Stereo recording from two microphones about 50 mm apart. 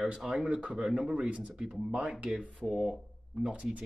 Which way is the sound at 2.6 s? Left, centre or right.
Right.